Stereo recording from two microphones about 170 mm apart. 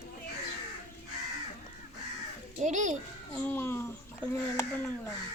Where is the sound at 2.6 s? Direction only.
45° right (ahead or behind).